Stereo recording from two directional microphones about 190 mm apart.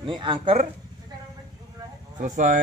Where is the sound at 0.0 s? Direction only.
25° right (ahead or behind).